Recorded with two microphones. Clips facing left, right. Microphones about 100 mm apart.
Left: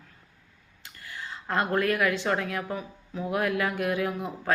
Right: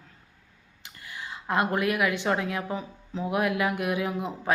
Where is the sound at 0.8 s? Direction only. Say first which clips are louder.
Even; 15° right (ahead or behind).